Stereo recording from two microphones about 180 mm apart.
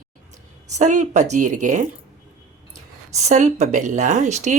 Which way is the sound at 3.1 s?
40° right (ahead or behind).